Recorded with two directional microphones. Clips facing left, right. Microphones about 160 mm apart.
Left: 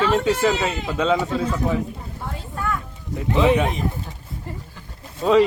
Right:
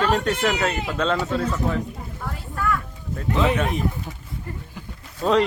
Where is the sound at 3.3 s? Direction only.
5° left (ahead or behind).